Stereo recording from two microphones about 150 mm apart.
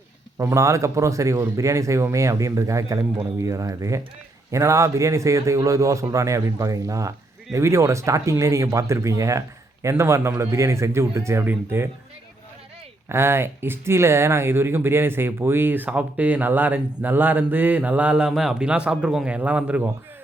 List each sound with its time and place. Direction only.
0.3 s speech: 20° right (ahead or behind)
13.1 s speech: 15° right (ahead or behind)